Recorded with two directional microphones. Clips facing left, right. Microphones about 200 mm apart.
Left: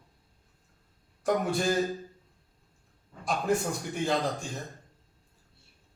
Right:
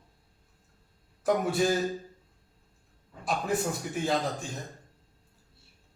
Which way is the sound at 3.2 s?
Centre (ahead or behind).